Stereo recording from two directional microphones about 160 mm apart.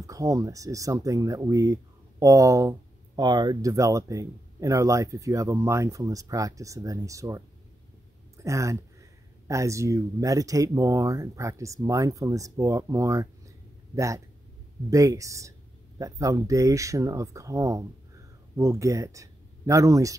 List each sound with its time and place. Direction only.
0.0 s speech: 20° right (ahead or behind)